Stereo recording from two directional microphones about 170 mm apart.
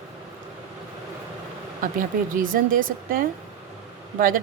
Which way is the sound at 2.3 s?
55° right (ahead or behind).